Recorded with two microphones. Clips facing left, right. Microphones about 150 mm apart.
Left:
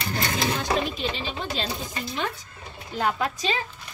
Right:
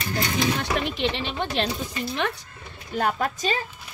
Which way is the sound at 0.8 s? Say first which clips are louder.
Right 3 dB; 70° right (ahead or behind).